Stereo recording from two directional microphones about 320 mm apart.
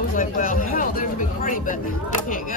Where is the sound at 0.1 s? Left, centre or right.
Left.